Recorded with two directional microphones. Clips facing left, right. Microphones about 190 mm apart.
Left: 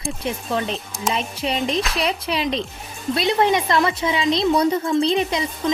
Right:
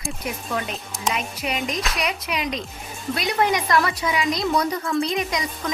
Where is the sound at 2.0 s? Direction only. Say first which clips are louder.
Left 4 dB; 30° left (ahead or behind).